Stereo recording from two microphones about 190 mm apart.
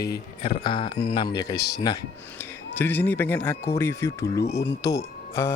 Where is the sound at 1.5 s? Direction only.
60° left (ahead or behind).